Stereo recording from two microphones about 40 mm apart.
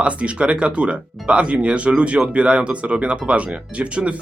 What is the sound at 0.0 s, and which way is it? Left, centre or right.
Speech, right.